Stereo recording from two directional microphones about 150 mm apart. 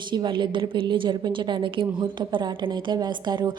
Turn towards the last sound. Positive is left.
turn(degrees=-30)  # may be behind; listen again after turning